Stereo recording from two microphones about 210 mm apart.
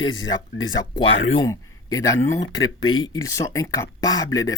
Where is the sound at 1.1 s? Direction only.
70° left (ahead or behind).